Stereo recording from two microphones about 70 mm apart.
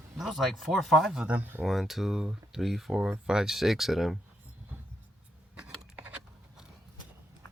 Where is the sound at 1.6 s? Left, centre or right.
Centre.